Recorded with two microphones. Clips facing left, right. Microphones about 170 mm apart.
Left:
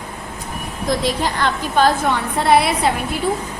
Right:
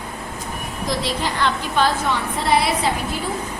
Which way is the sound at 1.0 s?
45° left (ahead or behind).